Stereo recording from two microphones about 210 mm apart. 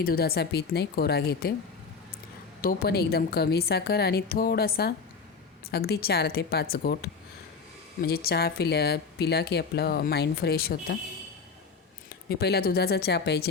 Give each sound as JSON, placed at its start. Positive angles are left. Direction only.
{"t": 0.0, "sound": "a woman's voice", "side_deg": 45}
{"t": 2.6, "sound": "a woman's voice", "side_deg": 45}
{"t": 12.3, "sound": "a woman's voice", "side_deg": 50}